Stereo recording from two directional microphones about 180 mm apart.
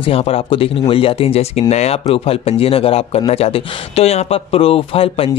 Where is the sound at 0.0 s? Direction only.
30° left (ahead or behind).